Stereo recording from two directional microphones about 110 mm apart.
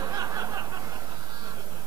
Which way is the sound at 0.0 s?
35° right (ahead or behind).